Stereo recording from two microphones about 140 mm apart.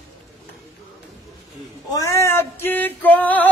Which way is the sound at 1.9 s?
20° left (ahead or behind).